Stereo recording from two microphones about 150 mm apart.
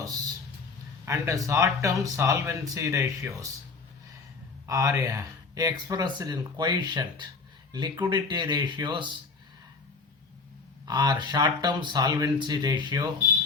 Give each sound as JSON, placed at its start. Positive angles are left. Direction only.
{"t": 1.0, "sound": "speech", "side_deg": -20}
{"t": 4.6, "sound": "speech", "side_deg": -20}
{"t": 10.8, "sound": "speech", "side_deg": -30}